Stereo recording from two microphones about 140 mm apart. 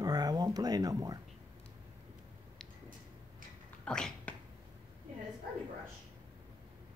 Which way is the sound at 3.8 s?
5° left (ahead or behind).